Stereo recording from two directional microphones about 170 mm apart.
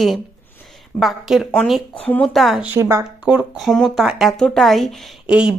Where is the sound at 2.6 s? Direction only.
10° right (ahead or behind).